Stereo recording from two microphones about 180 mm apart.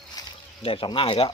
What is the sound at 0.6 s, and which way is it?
Speech, 30° left (ahead or behind).